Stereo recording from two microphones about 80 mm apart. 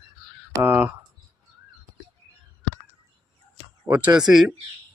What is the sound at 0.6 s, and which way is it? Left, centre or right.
Speech, right.